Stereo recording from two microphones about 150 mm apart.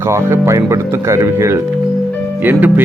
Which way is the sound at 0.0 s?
15° right (ahead or behind).